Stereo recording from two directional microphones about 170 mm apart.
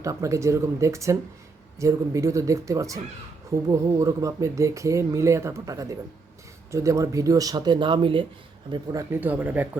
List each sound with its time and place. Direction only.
0.0 s speech: 20° right (ahead or behind)
8.7 s speech: 20° right (ahead or behind)